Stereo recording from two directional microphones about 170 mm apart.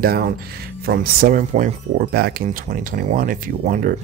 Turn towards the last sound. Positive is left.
turn(degrees=-50)  # may be behind; listen again after turning